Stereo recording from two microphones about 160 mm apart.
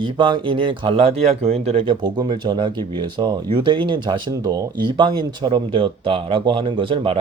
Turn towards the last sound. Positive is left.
turn(degrees=-30)  # may be behind; listen again after turning